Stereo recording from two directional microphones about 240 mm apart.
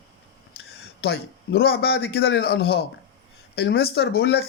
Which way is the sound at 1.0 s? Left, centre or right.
Left.